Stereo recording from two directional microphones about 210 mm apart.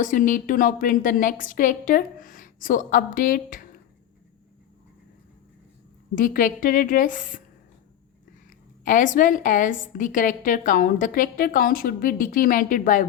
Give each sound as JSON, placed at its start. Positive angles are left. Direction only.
{"t": 0.0, "sound": "a woman's voice", "side_deg": 40}
{"t": 6.1, "sound": "a woman's voice", "side_deg": 40}
{"t": 8.4, "sound": "a woman's voice", "side_deg": 40}